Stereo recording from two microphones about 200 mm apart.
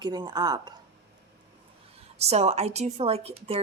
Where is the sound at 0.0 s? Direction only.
20° right (ahead or behind).